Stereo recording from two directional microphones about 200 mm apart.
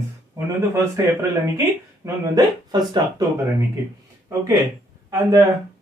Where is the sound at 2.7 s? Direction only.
20° right (ahead or behind).